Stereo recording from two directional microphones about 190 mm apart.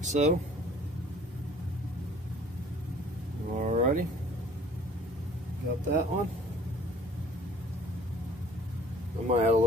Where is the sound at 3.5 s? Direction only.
40° right (ahead or behind).